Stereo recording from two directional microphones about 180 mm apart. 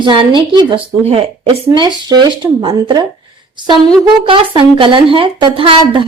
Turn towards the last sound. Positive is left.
turn(degrees=-30)  # may be behind; listen again after turning